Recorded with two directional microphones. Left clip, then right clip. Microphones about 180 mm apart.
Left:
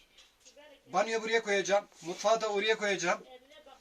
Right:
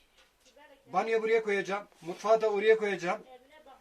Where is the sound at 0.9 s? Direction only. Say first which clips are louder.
Right 2 dB; centre (ahead or behind).